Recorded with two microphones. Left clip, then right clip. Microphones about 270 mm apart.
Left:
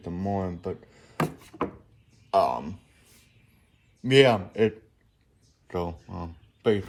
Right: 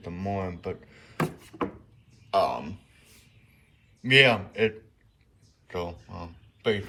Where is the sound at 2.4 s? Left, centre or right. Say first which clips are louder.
Left 2 dB; centre.